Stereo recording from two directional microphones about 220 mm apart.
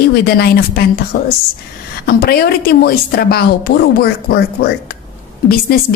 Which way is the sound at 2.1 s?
45° left (ahead or behind).